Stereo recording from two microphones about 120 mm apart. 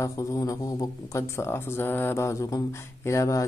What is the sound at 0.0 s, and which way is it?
Speech, 25° left (ahead or behind).